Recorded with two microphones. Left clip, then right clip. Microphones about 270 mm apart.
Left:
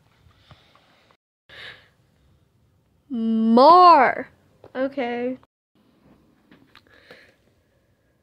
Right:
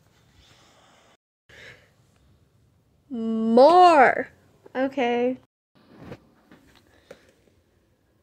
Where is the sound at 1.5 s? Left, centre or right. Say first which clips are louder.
Left 6 dB; left.